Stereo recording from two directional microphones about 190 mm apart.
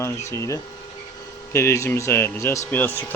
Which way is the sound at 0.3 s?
15° left (ahead or behind).